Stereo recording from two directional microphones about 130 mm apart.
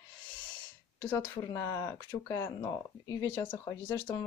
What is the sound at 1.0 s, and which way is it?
Speech, 15° left (ahead or behind).